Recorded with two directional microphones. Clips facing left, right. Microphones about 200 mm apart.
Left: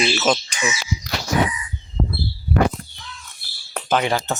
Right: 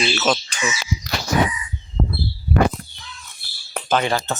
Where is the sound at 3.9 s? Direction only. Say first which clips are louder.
Even; 10° left (ahead or behind).